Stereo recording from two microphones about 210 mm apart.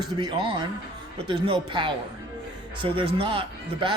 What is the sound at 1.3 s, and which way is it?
Speech, 25° right (ahead or behind).